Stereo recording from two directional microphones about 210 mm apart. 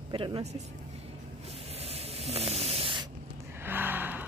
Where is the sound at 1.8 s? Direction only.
30° right (ahead or behind).